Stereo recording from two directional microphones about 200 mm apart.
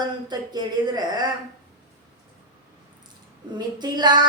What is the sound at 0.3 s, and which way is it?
A woman's voice, 20° right (ahead or behind).